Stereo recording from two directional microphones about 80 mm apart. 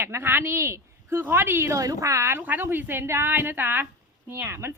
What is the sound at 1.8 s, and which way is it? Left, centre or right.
A woman's voice, right.